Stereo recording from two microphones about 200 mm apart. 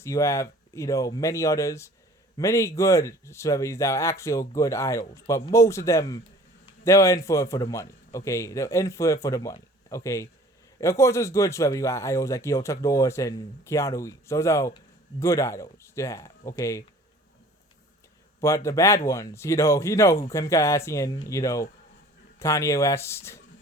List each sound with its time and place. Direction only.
0.0 s speech: 15° left (ahead or behind)
18.3 s speech: 15° left (ahead or behind)